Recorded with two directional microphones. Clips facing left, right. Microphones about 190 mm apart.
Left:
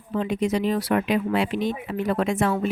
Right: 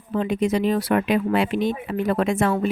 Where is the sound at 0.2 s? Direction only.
55° right (ahead or behind).